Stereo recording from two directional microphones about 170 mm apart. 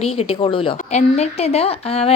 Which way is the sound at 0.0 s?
35° left (ahead or behind).